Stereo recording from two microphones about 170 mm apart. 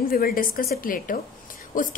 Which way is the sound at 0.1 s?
60° left (ahead or behind).